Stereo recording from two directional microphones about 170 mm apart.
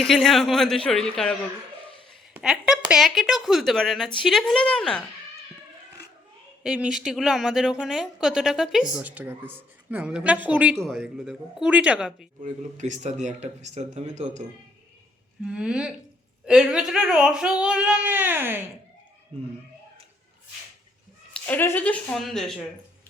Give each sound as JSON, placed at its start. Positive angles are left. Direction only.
{"t": 0.0, "sound": "a woman's voice", "side_deg": 0}
{"t": 6.6, "sound": "a woman's voice", "side_deg": -5}
{"t": 12.4, "sound": "speech", "side_deg": -45}
{"t": 15.4, "sound": "a woman's voice", "side_deg": -5}
{"t": 21.3, "sound": "speech", "side_deg": 10}